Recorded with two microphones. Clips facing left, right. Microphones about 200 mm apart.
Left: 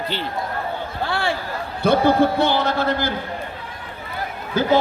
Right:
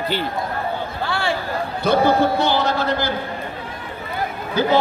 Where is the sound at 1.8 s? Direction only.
55° left (ahead or behind).